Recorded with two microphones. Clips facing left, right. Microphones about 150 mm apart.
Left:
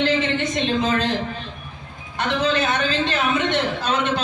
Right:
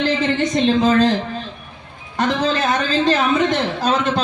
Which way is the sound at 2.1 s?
35° right (ahead or behind).